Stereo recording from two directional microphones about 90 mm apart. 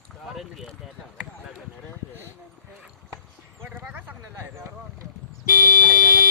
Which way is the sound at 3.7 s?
20° right (ahead or behind).